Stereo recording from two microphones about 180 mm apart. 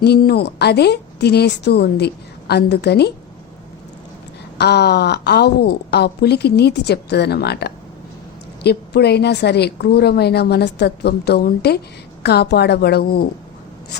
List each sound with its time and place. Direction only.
0.0 s a woman's voice: 65° left (ahead or behind)
4.5 s a woman's voice: 65° left (ahead or behind)